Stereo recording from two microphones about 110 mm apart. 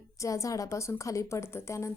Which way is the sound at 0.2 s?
30° left (ahead or behind).